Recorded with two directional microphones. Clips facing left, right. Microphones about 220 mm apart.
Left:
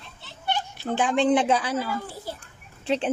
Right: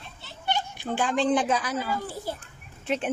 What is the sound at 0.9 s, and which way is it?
Speech, 20° left (ahead or behind).